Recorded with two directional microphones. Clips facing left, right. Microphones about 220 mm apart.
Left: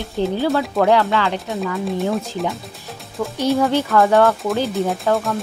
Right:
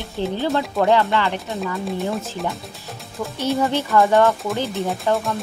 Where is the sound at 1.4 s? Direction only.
Centre (ahead or behind).